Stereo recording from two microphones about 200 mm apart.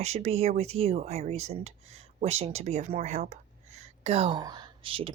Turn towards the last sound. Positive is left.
turn(degrees=-25)  # may be behind; listen again after turning